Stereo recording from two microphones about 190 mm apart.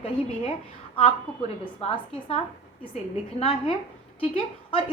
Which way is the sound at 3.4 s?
30° left (ahead or behind).